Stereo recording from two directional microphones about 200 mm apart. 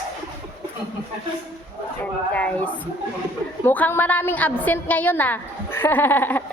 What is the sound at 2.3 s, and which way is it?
A woman's voice, 5° left (ahead or behind).